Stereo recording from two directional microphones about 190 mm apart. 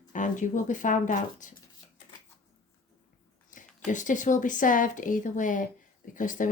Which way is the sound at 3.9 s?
40° left (ahead or behind).